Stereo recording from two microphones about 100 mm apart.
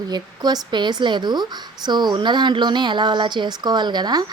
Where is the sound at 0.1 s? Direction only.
45° right (ahead or behind).